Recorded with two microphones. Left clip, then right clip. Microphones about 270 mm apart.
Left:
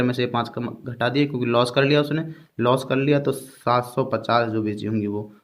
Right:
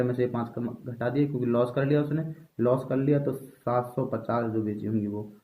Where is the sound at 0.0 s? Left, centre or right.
Left.